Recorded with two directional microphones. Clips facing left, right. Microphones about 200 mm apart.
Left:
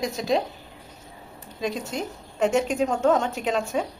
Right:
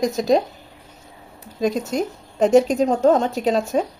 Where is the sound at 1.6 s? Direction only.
40° right (ahead or behind).